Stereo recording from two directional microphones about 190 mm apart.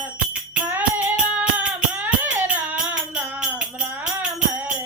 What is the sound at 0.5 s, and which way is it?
Music, 5° right (ahead or behind).